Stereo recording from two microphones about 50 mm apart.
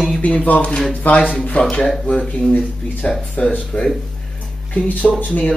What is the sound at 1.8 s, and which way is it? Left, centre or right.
Speech, centre.